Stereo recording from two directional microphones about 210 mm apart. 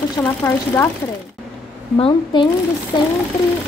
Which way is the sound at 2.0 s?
20° left (ahead or behind).